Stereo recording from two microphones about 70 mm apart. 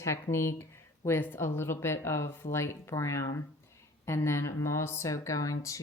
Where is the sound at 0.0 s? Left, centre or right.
Left.